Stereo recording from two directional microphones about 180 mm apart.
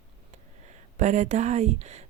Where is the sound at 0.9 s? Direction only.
40° right (ahead or behind).